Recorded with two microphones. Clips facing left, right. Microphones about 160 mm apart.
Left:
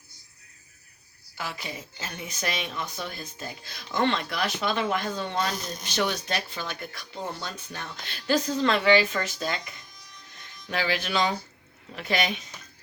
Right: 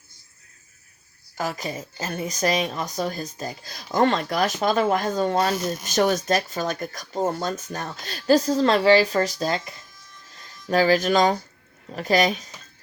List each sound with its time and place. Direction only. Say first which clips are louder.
1.4 s a woman's voice: right 7 dB; 40° right (ahead or behind)